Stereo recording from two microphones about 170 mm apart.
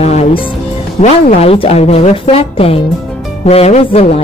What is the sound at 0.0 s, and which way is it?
Music, 40° left (ahead or behind).